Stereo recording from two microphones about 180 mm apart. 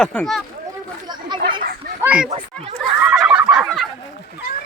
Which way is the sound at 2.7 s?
5° right (ahead or behind).